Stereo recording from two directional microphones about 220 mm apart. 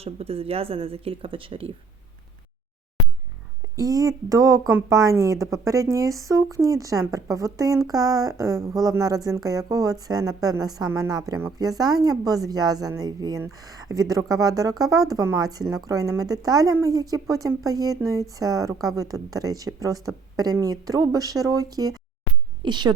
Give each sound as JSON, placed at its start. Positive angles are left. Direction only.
{"t": 0.0, "sound": "speech", "side_deg": -25}
{"t": 3.8, "sound": "a woman's voice", "side_deg": -15}